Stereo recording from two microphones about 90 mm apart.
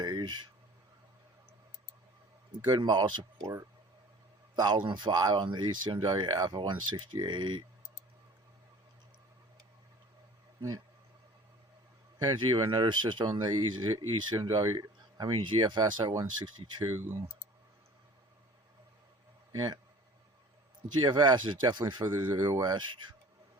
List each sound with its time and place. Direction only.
0.0 s a sound: 50° right (ahead or behind)
2.6 s speech: 50° right (ahead or behind)
3.4 s speech: 35° right (ahead or behind)
4.5 s a man's voice: 50° right (ahead or behind)
12.2 s speech: 60° right (ahead or behind)
15.4 s speech: 60° right (ahead or behind)
16.9 s speech: 25° right (ahead or behind)
19.5 s speech: 45° right (ahead or behind)
21.0 s speech: 55° right (ahead or behind)
22.0 s speech: 25° right (ahead or behind)
22.6 s speech: 55° right (ahead or behind)